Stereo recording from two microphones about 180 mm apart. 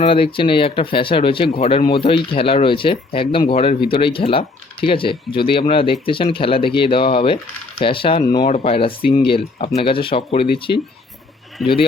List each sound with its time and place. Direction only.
0.0 s speech: 30° left (ahead or behind)
8.4 s speech: 35° left (ahead or behind)